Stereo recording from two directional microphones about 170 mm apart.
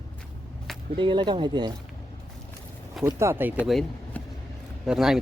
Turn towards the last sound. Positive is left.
turn(degrees=0)  # may be behind; listen again after turning